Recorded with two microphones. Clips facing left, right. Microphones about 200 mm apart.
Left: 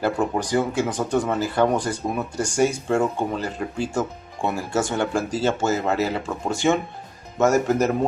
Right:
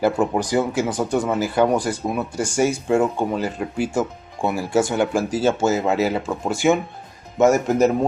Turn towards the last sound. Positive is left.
turn(degrees=-10)  # may be behind; listen again after turning